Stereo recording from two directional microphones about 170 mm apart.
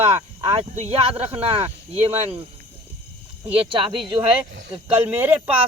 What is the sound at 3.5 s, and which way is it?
Speech, 30° right (ahead or behind).